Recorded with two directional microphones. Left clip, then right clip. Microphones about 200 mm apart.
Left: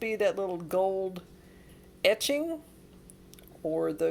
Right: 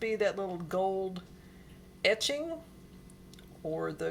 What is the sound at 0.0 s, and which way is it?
Speech, 35° left (ahead or behind).